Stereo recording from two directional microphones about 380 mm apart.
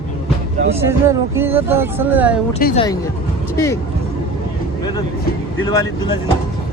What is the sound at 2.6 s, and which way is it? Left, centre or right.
Speech, left.